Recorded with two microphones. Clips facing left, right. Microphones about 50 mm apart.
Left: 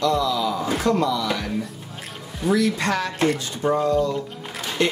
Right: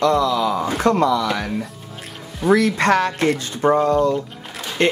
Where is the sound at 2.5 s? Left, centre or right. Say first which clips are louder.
Right 5 dB; right.